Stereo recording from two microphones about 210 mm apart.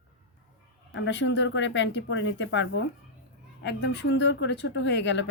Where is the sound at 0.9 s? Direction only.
60° left (ahead or behind).